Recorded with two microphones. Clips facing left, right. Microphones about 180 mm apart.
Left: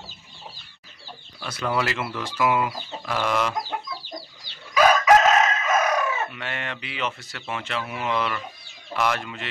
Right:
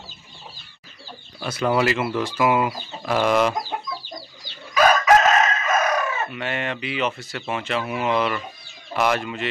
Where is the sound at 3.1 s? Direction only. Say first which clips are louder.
Right 6 dB; 20° right (ahead or behind).